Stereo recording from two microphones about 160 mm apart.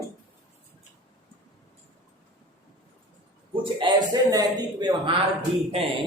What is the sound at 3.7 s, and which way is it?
A man's voice, 30° right (ahead or behind).